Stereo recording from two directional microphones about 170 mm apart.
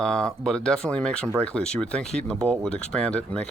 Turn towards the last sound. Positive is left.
turn(degrees=5)  # may be behind; listen again after turning